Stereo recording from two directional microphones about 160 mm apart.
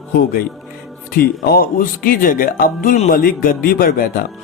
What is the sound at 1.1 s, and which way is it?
Speech, 70° left (ahead or behind).